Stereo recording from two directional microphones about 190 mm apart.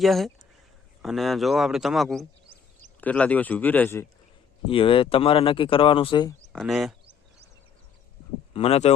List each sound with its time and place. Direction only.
0.0 s speech: centre (ahead or behind)
4.7 s speech: 30° left (ahead or behind)
6.5 s speech: centre (ahead or behind)
8.5 s speech: 30° left (ahead or behind)